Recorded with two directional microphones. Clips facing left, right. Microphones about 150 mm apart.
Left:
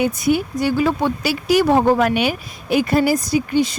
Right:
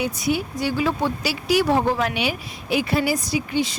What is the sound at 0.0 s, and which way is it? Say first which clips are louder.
Speech: left 5 dB; 50° left (ahead or behind).